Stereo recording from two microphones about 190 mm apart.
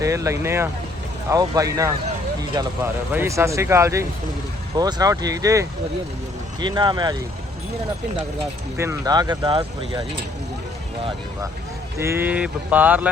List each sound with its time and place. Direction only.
0.0 s mantra: 15° right (ahead or behind)
2.4 s speech: 20° right (ahead or behind)
3.1 s mantra: 15° right (ahead or behind)
4.8 s speech: 20° right (ahead or behind)
8.8 s speech: 15° right (ahead or behind)
11.9 s mantra: 15° right (ahead or behind)